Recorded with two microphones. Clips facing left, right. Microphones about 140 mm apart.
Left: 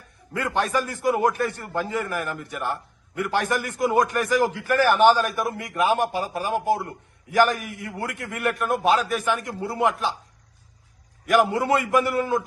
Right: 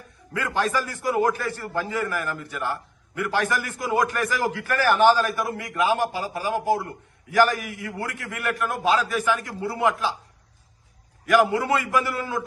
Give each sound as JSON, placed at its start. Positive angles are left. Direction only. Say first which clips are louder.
{"t": 0.3, "sound": "a man's voice", "louder": "left 1 dB", "side_deg": 20}
{"t": 11.3, "sound": "a man's voice", "louder": "even", "side_deg": 20}